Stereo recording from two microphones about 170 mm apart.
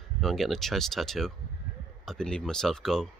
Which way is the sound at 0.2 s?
Centre (ahead or behind).